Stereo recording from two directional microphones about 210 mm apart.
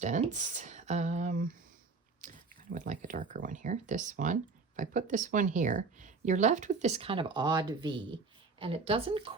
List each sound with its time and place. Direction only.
0.0 s speech: 35° right (ahead or behind)
2.2 s pig: 40° right (ahead or behind)
2.7 s a woman's voice: 35° right (ahead or behind)